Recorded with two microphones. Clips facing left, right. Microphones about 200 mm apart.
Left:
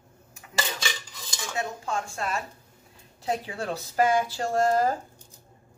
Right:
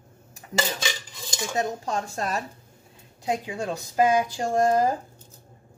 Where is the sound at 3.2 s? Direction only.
15° right (ahead or behind).